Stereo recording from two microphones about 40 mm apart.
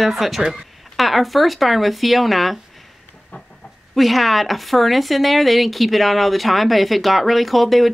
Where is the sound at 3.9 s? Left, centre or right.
Centre.